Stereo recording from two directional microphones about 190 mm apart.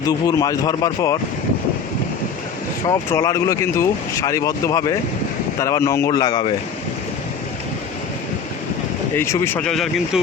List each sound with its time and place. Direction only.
0.0 s speech: 20° left (ahead or behind)
2.8 s speech: 20° left (ahead or behind)
9.1 s speech: 15° left (ahead or behind)